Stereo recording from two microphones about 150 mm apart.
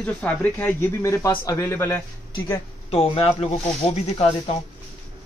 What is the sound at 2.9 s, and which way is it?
Speech, 40° left (ahead or behind).